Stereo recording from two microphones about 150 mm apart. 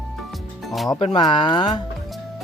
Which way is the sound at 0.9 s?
35° left (ahead or behind).